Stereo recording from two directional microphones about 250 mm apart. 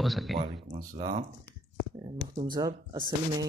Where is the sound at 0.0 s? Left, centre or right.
Centre.